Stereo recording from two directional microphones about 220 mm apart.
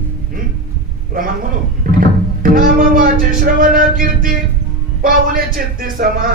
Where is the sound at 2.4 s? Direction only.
40° right (ahead or behind).